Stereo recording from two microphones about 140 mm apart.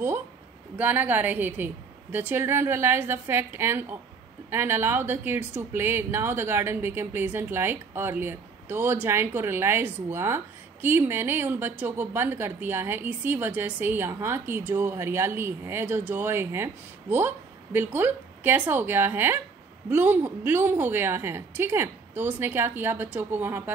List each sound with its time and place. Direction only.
0.7 s speech: 10° right (ahead or behind)